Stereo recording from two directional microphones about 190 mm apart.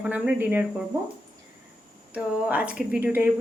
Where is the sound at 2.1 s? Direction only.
5° right (ahead or behind).